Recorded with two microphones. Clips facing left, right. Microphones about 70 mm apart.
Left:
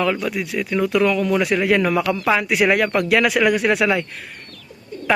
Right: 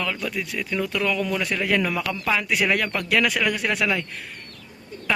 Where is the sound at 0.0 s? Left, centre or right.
Left.